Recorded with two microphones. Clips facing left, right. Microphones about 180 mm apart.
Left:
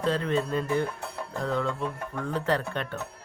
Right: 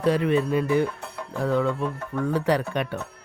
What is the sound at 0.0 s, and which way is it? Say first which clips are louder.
Speech: right 5 dB; 10° right (ahead or behind).